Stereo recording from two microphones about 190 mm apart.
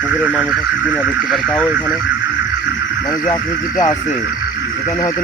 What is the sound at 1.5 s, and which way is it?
Speech, 5° left (ahead or behind).